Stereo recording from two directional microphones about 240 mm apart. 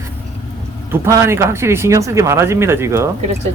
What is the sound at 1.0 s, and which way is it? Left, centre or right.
Speech, centre.